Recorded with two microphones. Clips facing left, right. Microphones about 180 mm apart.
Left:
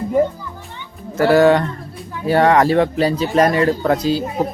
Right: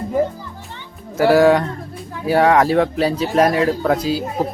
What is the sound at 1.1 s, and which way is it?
Speech, 5° right (ahead or behind).